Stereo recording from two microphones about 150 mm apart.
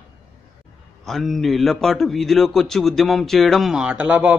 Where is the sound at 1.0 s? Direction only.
Centre (ahead or behind).